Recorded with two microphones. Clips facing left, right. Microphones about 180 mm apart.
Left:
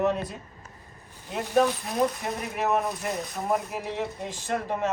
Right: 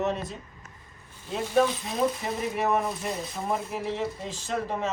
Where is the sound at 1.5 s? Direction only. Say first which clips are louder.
Left 1 dB; centre (ahead or behind).